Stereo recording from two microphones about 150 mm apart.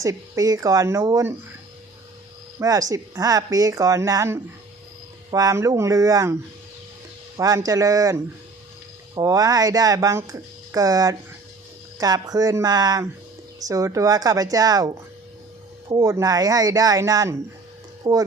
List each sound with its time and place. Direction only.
0.0 s speech: 20° right (ahead or behind)
2.6 s speech: 25° right (ahead or behind)
7.3 s speech: 20° right (ahead or behind)